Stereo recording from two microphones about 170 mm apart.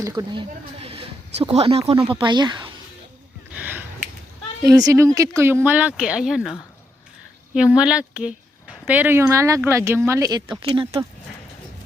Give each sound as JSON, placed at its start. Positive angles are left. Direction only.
{"t": 0.0, "sound": "speech", "side_deg": -25}
{"t": 3.5, "sound": "a sound", "side_deg": -10}
{"t": 4.7, "sound": "speech", "side_deg": -20}
{"t": 10.6, "sound": "speech", "side_deg": -35}